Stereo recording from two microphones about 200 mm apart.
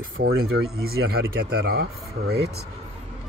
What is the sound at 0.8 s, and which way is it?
Speech, 50° right (ahead or behind).